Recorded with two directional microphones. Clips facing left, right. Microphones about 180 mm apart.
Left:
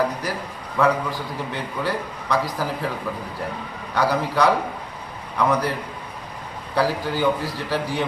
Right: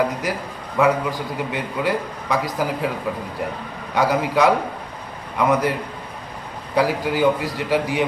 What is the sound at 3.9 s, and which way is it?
A man's voice, 20° right (ahead or behind).